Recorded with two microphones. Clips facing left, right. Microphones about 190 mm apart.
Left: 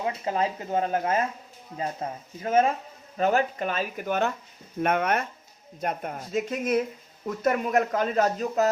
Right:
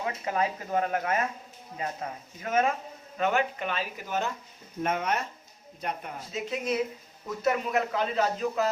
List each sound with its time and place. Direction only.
0.0 s speech: 30° left (ahead or behind); by 5.2 s 60° left (ahead or behind)
5.8 s speech: 50° left (ahead or behind)